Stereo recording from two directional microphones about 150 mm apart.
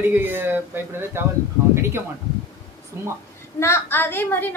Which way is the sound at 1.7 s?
15° right (ahead or behind).